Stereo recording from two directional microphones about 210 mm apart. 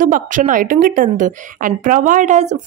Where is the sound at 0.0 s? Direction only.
40° right (ahead or behind).